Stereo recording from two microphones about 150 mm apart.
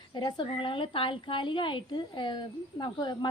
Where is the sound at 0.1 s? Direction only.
30° left (ahead or behind).